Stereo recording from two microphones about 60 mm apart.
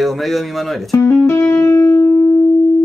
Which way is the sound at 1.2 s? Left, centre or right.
Left.